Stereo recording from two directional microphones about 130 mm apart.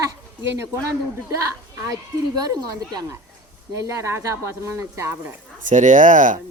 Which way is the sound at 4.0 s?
20° right (ahead or behind).